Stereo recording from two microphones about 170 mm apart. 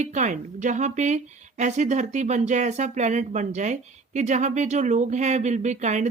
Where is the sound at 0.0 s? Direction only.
45° right (ahead or behind).